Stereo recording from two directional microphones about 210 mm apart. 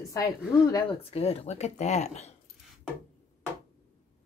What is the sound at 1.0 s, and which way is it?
Speech, 30° left (ahead or behind).